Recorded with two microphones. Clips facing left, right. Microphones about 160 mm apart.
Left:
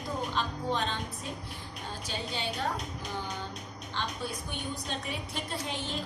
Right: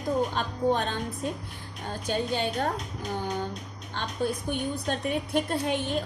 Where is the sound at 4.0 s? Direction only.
50° right (ahead or behind).